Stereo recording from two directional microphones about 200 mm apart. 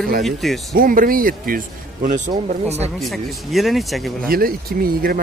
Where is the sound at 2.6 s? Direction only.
30° right (ahead or behind).